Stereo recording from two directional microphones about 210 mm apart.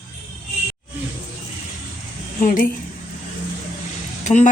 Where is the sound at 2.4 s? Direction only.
40° left (ahead or behind).